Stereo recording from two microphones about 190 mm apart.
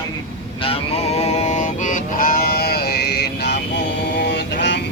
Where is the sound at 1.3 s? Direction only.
35° left (ahead or behind); by 3.6 s 60° left (ahead or behind).